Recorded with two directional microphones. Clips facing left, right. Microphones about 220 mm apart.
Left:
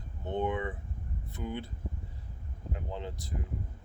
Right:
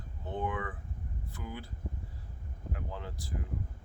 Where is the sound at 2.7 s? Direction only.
20° left (ahead or behind).